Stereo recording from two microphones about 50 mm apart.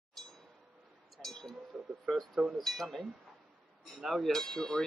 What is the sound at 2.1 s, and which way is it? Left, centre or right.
Speech, centre.